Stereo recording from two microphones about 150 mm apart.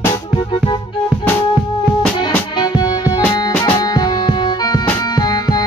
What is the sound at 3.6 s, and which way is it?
Music, 30° left (ahead or behind).